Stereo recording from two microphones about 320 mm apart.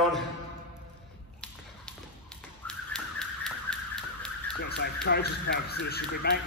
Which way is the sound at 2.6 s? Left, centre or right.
Centre.